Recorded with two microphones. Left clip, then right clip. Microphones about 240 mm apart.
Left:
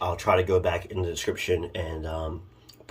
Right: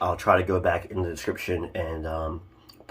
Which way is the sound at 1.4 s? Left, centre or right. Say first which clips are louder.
Left 2 dB; centre.